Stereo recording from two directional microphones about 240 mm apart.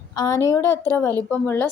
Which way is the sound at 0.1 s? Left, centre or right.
Centre.